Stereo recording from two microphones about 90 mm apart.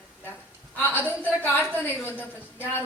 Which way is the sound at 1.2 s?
20° left (ahead or behind).